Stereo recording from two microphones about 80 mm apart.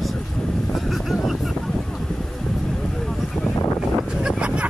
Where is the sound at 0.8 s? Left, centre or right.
Centre.